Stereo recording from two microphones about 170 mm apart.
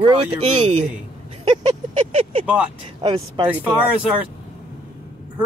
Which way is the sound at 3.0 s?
30° right (ahead or behind).